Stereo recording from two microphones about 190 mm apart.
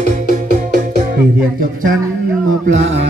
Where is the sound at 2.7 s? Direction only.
75° right (ahead or behind).